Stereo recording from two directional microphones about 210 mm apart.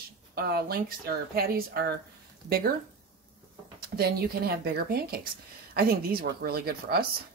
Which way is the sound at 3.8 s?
45° right (ahead or behind).